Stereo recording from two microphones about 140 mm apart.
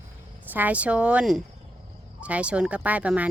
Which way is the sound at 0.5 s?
10° right (ahead or behind).